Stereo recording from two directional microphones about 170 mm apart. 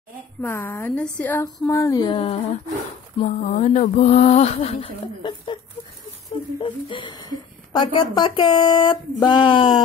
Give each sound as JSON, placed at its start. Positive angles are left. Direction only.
{"t": 0.4, "sound": "speech", "side_deg": 10}
{"t": 3.2, "sound": "a sound", "side_deg": 45}
{"t": 5.2, "sound": "speech", "side_deg": 30}
{"t": 6.6, "sound": "speech", "side_deg": 30}